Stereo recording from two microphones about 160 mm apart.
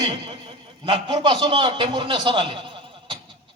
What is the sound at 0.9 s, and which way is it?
A man's voice, 30° right (ahead or behind).